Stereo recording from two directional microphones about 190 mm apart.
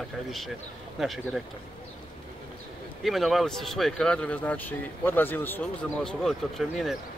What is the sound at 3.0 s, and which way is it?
Speech, centre (ahead or behind).